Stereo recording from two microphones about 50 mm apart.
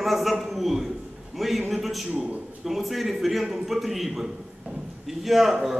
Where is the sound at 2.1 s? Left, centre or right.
Right.